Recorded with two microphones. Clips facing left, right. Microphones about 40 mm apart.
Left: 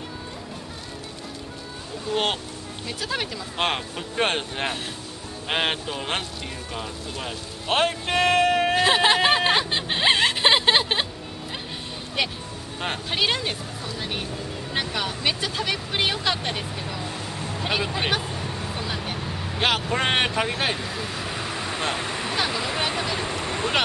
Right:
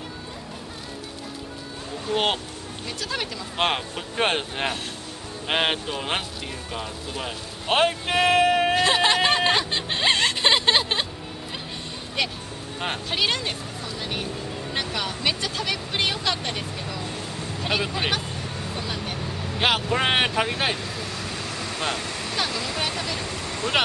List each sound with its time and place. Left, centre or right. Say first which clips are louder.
2.1 s a man's voice: right 1 dB; centre
2.9 s speech: left 1 dB; centre
3.5 s a man's voice: right 1 dB; centre
8.8 s hubbub: left 1 dB; centre
12.2 s speech: even; centre
17.3 s vehicle: even; centre
19.8 s speech: right 1 dB; centre; by 23.7 s left